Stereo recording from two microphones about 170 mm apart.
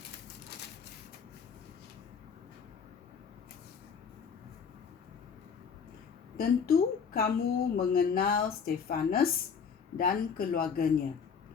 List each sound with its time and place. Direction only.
6.3 s a woman's voice: 60° left (ahead or behind)